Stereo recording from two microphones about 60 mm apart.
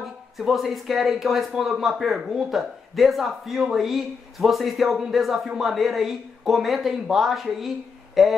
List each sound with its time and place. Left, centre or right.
0.0 s speech: centre